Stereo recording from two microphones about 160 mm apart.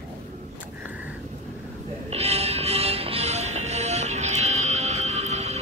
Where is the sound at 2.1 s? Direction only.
40° right (ahead or behind).